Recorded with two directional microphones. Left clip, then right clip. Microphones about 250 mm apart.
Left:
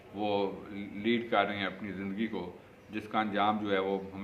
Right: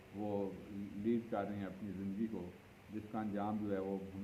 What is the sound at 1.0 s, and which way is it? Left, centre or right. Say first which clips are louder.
Speech: left 11 dB; centre.